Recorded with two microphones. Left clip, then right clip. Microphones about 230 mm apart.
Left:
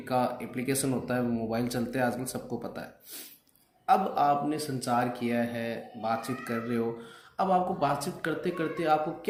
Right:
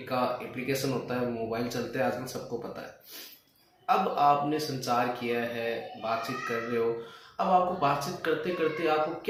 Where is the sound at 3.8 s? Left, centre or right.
Left.